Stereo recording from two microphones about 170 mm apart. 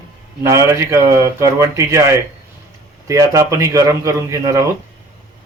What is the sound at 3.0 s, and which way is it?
A man's voice, 20° right (ahead or behind).